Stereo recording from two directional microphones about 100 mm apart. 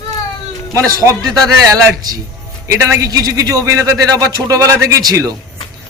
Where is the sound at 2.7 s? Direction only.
30° right (ahead or behind).